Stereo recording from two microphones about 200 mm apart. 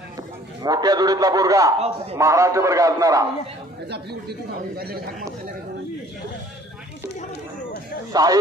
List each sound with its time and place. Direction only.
0.6 s a man's voice: 20° right (ahead or behind)
3.9 s speech: 55° right (ahead or behind)
8.1 s a man's voice: 20° right (ahead or behind)